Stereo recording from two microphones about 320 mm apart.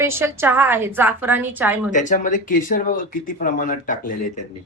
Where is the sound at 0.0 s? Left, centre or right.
Centre.